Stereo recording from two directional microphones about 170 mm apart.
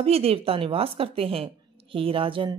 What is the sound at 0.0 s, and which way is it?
Speech, 35° right (ahead or behind).